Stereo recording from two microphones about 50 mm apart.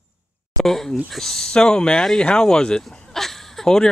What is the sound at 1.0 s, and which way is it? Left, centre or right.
Speech, centre.